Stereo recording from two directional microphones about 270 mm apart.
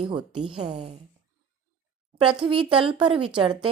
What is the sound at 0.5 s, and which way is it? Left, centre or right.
Speech, right.